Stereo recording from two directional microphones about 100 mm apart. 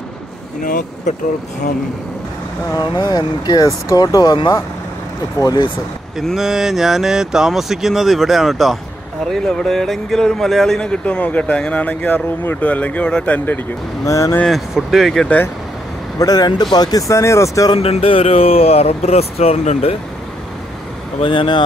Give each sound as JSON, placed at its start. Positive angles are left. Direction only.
{"t": 2.7, "sound": "speech", "side_deg": 45}
{"t": 6.1, "sound": "speech", "side_deg": -5}
{"t": 14.0, "sound": "speech", "side_deg": 30}
{"t": 14.4, "sound": "speech", "side_deg": 0}
{"t": 16.2, "sound": "speech", "side_deg": 40}
{"t": 17.7, "sound": "speech", "side_deg": 85}
{"t": 21.2, "sound": "speech", "side_deg": 55}